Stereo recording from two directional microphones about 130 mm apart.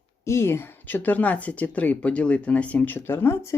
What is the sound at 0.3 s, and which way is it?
Speech, 20° left (ahead or behind).